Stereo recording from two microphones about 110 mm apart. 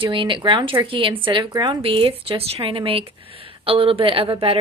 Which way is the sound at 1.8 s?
55° right (ahead or behind).